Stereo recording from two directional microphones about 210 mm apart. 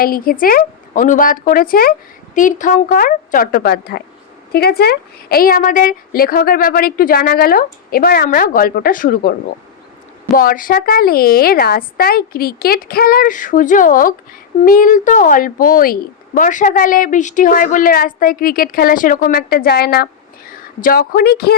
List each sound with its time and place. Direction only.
0.0 s a woman's voice: 45° left (ahead or behind)
10.3 s a woman's voice: 40° left (ahead or behind)